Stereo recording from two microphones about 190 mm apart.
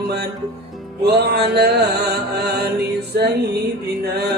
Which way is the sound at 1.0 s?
60° right (ahead or behind).